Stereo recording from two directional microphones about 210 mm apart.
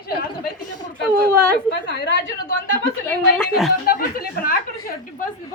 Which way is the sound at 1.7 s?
55° left (ahead or behind).